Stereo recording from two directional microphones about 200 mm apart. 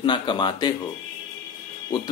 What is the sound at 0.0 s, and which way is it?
Speech, 25° left (ahead or behind).